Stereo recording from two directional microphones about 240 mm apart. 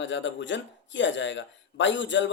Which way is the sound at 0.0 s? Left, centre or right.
Left.